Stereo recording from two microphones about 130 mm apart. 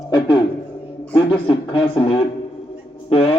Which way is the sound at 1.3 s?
45° left (ahead or behind).